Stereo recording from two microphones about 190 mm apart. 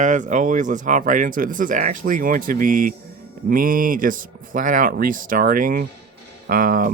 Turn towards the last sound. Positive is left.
turn(degrees=-45)  # may be behind; listen again after turning